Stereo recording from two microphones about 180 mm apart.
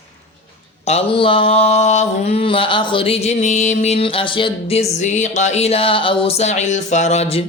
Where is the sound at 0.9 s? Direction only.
30° left (ahead or behind).